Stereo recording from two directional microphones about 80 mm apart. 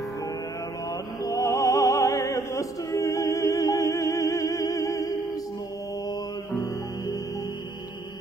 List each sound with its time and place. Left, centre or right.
1.2 s music: left